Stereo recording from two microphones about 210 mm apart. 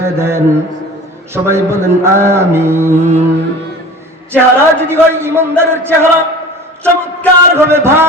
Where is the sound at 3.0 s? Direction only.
30° right (ahead or behind).